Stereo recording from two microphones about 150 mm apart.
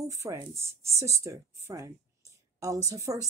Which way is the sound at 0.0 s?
20° right (ahead or behind).